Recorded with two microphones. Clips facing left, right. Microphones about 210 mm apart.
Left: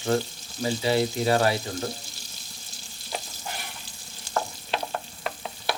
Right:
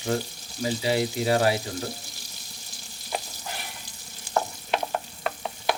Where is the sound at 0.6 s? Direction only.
35° left (ahead or behind).